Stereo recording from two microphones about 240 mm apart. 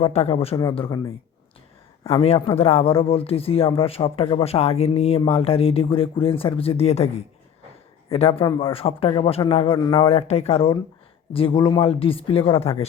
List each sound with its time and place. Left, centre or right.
0.0 s a man's voice: left